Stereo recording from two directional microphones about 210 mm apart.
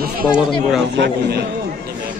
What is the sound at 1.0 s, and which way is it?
Speech, 50° right (ahead or behind).